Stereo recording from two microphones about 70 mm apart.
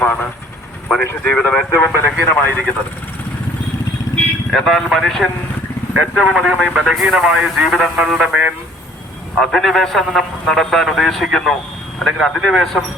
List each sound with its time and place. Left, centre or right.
0.0 s vehicle: left
1.2 s speech: centre
4.5 s speech: centre
9.4 s speech: centre